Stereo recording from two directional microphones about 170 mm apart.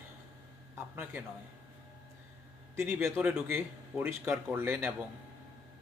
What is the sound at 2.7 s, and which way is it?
A man's voice, 15° right (ahead or behind).